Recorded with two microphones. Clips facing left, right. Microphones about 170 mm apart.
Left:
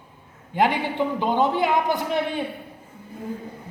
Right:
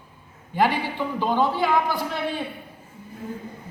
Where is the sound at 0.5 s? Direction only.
20° left (ahead or behind).